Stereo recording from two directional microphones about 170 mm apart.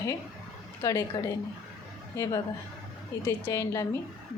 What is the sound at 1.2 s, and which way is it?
A woman's voice, 20° left (ahead or behind).